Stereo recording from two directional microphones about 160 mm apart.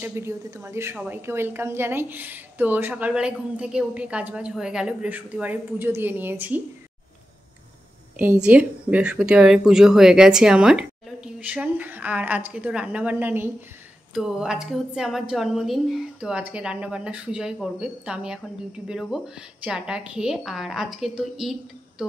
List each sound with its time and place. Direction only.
0.0 s a woman's voice: 15° right (ahead or behind)
8.2 s a woman's voice: 10° right (ahead or behind)